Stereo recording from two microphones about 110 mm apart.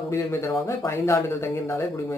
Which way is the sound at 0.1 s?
25° left (ahead or behind).